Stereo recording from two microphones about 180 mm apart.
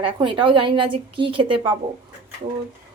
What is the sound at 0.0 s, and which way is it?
Speech, 25° right (ahead or behind).